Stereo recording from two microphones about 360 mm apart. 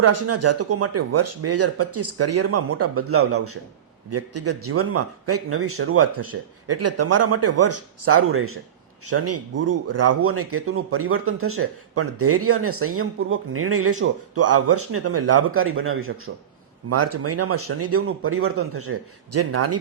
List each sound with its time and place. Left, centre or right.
0.0 s speech: right